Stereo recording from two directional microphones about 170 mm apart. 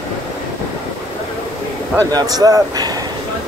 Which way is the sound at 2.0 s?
20° right (ahead or behind).